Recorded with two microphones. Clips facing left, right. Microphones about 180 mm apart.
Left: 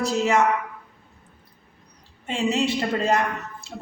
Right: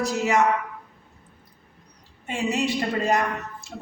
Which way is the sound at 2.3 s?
15° right (ahead or behind).